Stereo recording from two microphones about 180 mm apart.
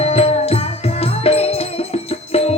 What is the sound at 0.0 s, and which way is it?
Music, 35° left (ahead or behind).